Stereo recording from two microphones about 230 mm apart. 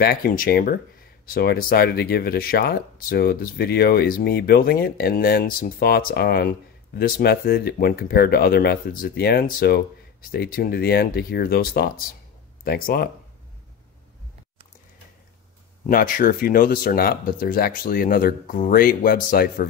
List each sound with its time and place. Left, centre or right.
0.0 s speech: left
15.9 s speech: left